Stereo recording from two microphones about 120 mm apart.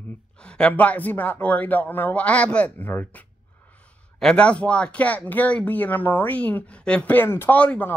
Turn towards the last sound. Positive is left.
turn(degrees=15)  # may be behind; listen again after turning